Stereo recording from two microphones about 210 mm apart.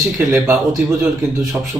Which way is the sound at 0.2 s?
10° right (ahead or behind).